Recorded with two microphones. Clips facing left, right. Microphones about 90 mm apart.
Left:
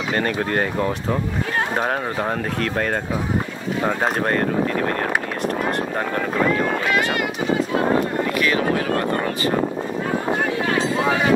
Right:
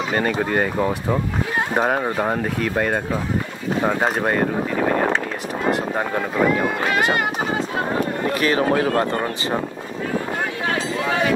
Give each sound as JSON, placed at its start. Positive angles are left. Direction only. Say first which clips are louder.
{"t": 0.1, "sound": "speech", "louder": "even", "side_deg": -5}
{"t": 8.4, "sound": "speech", "louder": "right 3 dB", "side_deg": -35}